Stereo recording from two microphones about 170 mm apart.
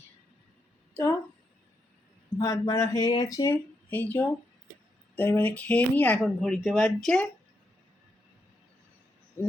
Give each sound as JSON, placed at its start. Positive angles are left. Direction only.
{"t": 2.4, "sound": "speech", "side_deg": 15}
{"t": 3.5, "sound": "speech", "side_deg": 10}